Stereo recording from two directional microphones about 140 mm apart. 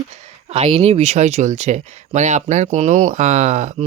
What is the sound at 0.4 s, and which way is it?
Speech, 45° right (ahead or behind).